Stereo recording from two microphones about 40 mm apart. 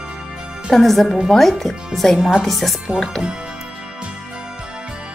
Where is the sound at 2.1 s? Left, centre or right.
Centre.